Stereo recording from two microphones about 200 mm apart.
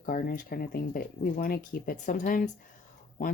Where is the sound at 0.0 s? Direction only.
45° left (ahead or behind).